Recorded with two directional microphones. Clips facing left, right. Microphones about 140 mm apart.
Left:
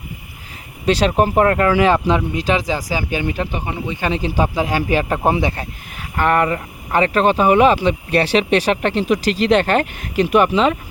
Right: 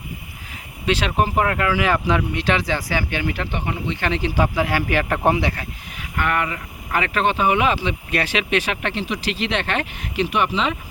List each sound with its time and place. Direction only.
0.9 s speech: 35° left (ahead or behind)
1.9 s speech: 25° left (ahead or behind)
6.0 s speech: 35° left (ahead or behind)